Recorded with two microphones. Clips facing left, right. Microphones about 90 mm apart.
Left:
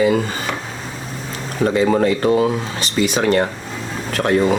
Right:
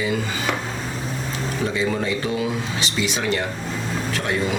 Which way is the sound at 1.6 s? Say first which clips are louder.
Left 9 dB; 50° left (ahead or behind).